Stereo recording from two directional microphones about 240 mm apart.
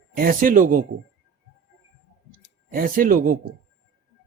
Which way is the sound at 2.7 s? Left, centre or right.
Right.